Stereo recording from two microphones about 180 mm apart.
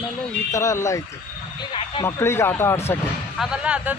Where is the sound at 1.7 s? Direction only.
30° left (ahead or behind).